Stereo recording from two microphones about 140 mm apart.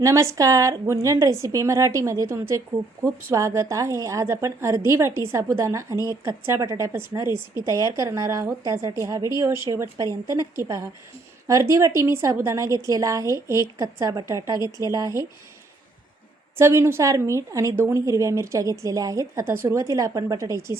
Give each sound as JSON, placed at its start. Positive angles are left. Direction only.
{"t": 0.0, "sound": "a woman's voice", "side_deg": -20}
{"t": 11.4, "sound": "a woman's voice", "side_deg": -20}
{"t": 16.6, "sound": "a woman's voice", "side_deg": -20}